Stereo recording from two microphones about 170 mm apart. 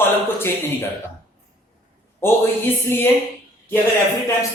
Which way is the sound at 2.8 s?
15° left (ahead or behind).